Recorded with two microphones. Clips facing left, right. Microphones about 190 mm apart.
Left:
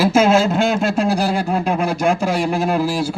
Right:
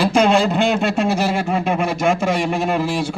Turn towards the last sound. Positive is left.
turn(degrees=5)  # may be behind; listen again after turning